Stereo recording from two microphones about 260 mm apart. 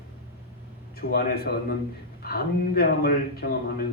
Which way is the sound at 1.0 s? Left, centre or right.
Left.